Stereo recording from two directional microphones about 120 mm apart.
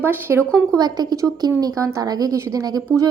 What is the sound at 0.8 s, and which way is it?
A woman's voice, 35° right (ahead or behind).